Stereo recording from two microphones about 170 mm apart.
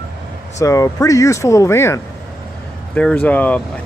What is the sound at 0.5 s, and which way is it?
Speech, 20° left (ahead or behind).